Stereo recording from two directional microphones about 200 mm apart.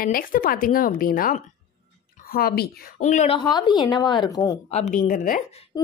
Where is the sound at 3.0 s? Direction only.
35° left (ahead or behind); by 4.5 s 20° left (ahead or behind).